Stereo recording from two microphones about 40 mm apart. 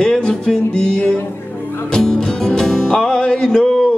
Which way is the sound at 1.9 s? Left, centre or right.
Centre.